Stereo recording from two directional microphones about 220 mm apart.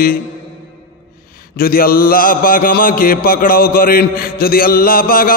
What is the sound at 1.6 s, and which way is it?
Mantra, 40° left (ahead or behind).